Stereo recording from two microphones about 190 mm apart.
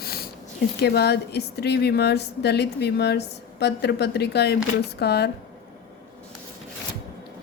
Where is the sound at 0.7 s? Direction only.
60° left (ahead or behind).